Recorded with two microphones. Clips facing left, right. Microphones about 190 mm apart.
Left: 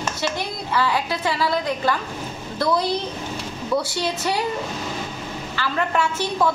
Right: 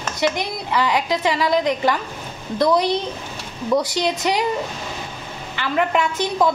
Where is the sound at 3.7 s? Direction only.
15° right (ahead or behind).